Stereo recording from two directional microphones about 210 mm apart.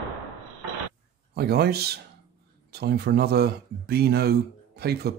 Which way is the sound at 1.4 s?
50° right (ahead or behind).